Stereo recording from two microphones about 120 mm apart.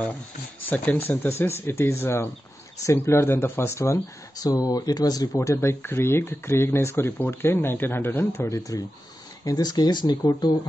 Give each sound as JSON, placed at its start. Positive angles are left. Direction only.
{"t": 0.7, "sound": "speech", "side_deg": 15}